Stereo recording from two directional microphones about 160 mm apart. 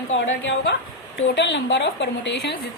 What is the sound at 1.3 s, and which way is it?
A woman's voice, 90° left.